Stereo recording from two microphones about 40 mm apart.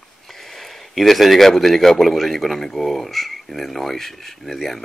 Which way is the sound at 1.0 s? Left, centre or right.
Centre.